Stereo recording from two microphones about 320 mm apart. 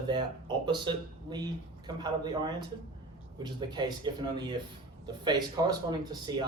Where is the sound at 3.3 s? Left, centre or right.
Centre.